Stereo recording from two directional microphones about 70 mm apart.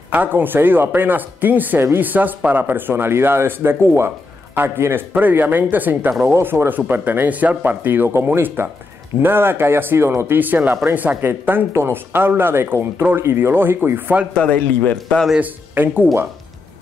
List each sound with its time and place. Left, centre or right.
0.1 s speech: right
14.3 s a man's voice: centre
15.4 s speech: right